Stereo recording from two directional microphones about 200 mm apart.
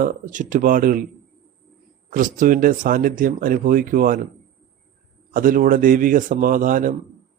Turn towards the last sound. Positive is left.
turn(degrees=-40)  # may be behind; listen again after turning